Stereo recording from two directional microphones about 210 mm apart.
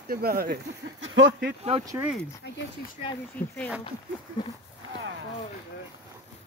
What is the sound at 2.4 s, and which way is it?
Speech, 55° left (ahead or behind).